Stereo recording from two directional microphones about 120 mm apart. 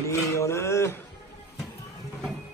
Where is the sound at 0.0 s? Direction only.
25° left (ahead or behind).